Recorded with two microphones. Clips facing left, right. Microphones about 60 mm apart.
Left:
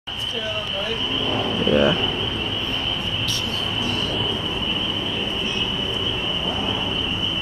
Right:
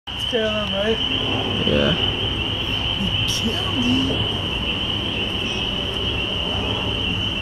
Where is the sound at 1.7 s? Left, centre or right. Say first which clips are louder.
Left 2 dB; left.